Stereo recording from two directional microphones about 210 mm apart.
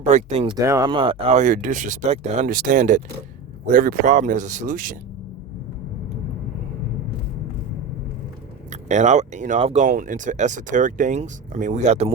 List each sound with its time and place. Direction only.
0.0 s speech: 35° right (ahead or behind)
0.5 s speech: 15° right (ahead or behind); by 4.9 s 40° right (ahead or behind)
8.7 s speech: 35° right (ahead or behind)